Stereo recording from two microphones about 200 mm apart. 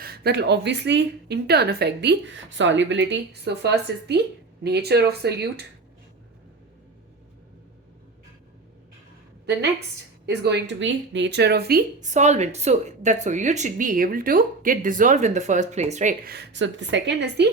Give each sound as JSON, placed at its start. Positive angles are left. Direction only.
{"t": 0.0, "sound": "a woman's voice", "side_deg": -50}
{"t": 10.2, "sound": "a woman's voice", "side_deg": -60}
{"t": 16.3, "sound": "a woman's voice", "side_deg": -60}